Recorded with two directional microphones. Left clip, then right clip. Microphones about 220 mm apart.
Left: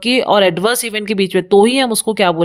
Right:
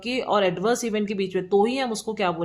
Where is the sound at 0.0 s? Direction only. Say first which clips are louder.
Left 10 dB; 45° left (ahead or behind).